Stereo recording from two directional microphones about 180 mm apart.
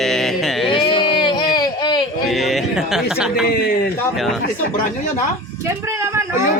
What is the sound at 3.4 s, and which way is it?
Speech, 55° left (ahead or behind).